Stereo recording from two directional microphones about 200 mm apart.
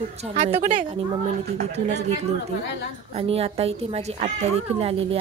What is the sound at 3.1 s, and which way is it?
A woman's voice, 30° right (ahead or behind).